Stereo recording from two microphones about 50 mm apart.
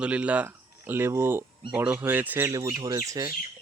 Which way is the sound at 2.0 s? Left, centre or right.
Right.